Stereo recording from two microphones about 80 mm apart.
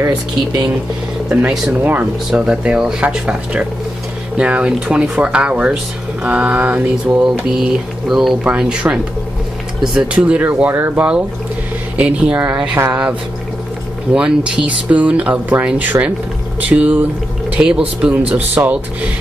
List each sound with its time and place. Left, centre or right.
1.7 s speech: right
7.5 s speech: centre
14.1 s speech: centre
18.1 s speech: right